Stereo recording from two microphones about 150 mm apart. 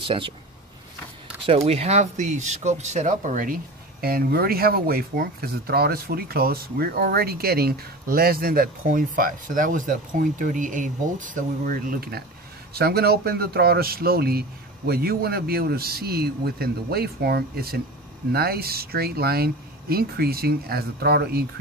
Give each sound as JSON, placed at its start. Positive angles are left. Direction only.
{"t": 0.0, "sound": "speech", "side_deg": -35}
{"t": 1.4, "sound": "speech", "side_deg": -40}